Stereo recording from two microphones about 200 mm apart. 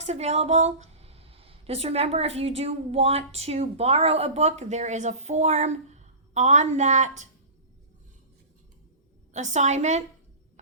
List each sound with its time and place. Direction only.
0.0 s a woman's voice: 35° right (ahead or behind)
9.3 s a woman's voice: 35° right (ahead or behind)